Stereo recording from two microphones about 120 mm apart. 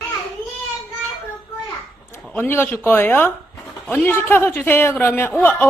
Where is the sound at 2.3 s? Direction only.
20° left (ahead or behind).